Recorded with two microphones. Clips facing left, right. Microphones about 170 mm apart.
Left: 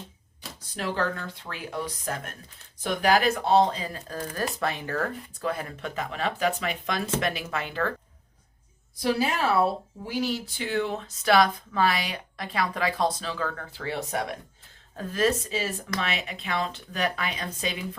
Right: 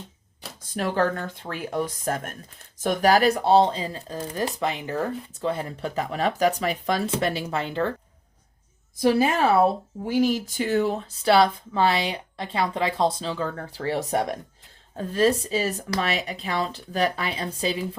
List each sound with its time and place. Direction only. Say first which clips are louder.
0.7 s speech: right 5 dB; 50° right (ahead or behind); by 7.9 s 25° right (ahead or behind)
9.0 s speech: right 5 dB; 50° right (ahead or behind); by 17.8 s 30° right (ahead or behind)